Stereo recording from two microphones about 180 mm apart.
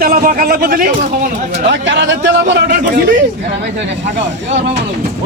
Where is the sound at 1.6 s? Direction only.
90° right.